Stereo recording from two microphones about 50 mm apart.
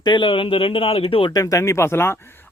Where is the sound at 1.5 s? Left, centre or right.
Left.